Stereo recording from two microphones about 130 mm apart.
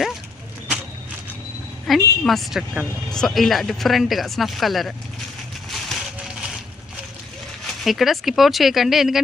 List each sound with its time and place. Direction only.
1.9 s speech: centre (ahead or behind)
5.7 s a sound: centre (ahead or behind)
7.9 s speech: centre (ahead or behind)